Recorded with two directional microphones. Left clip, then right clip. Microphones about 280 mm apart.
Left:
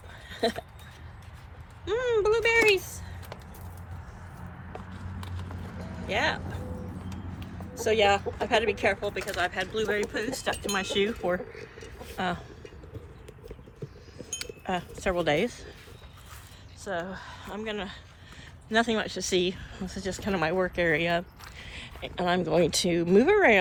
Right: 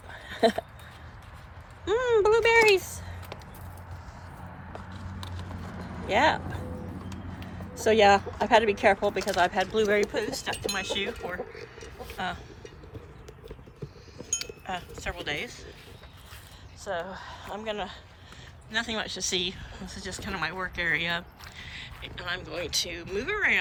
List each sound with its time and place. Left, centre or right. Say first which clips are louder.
1.8 s a sound: right 2 dB; right
6.1 s vehicle: right 5 dB; right
7.7 s speech: right 3 dB; right
10.0 s speech: right 2 dB; centre
14.2 s a sound: right 3 dB; centre
16.8 s speech: even; centre
18.7 s speech: left 4 dB; centre